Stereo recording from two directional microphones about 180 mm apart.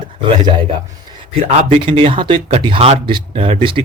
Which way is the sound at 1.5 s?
30° right (ahead or behind).